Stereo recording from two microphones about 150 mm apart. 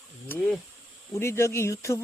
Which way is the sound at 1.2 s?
20° left (ahead or behind).